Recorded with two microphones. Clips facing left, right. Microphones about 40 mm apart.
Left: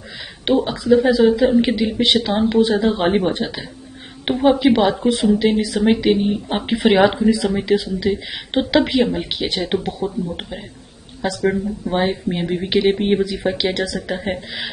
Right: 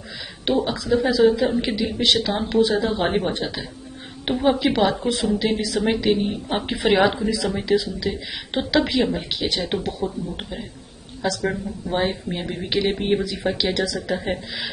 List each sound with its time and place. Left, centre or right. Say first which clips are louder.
0.5 s a woman's voice: left 5 dB; left; by 9.3 s centre
9.3 s a woman's voice: left 3 dB; left
12.7 s speech: left 6 dB; left
13.0 s a woman's voice: left 4 dB; centre